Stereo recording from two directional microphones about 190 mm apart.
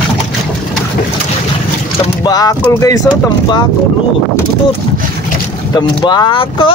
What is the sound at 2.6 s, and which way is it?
Speech, 15° left (ahead or behind).